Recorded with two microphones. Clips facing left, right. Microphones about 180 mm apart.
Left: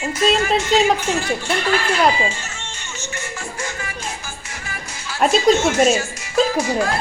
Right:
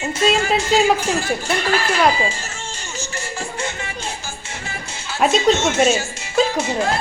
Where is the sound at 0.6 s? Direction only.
35° right (ahead or behind).